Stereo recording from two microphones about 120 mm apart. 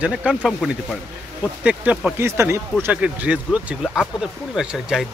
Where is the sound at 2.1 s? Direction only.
20° right (ahead or behind).